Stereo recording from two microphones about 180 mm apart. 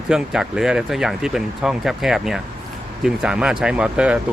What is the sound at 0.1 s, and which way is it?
Speech, 5° right (ahead or behind).